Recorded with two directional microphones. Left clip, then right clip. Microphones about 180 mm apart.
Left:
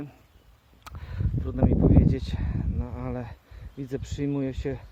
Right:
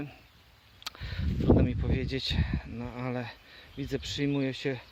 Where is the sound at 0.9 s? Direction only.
5° right (ahead or behind).